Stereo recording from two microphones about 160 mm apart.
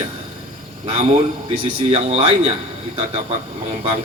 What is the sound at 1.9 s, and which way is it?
Speech, 40° right (ahead or behind).